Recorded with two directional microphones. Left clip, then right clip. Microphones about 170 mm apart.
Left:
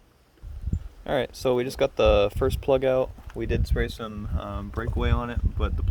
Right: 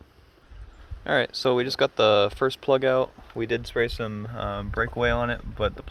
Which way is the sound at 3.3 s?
15° left (ahead or behind).